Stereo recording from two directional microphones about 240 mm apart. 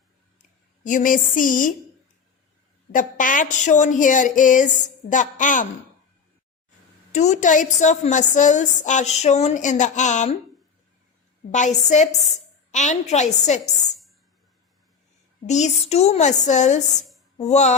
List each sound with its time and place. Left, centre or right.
0.9 s speech: left
2.9 s speech: left
7.1 s a woman's voice: left
11.5 s a woman's voice: left
15.4 s a woman's voice: left